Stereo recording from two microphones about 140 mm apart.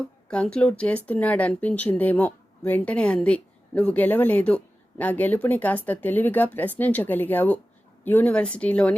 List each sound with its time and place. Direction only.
0.0 s speech: 5° left (ahead or behind)